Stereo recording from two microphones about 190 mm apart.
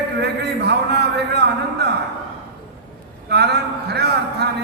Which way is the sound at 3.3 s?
60° right (ahead or behind).